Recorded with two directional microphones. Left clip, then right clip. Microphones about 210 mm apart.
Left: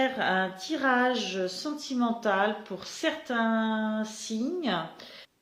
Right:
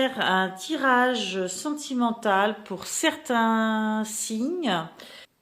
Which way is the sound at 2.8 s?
50° right (ahead or behind).